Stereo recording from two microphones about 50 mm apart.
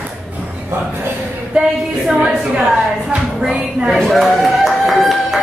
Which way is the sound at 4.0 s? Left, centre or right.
Centre.